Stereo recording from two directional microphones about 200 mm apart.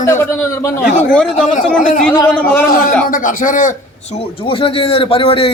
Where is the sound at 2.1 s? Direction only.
10° left (ahead or behind).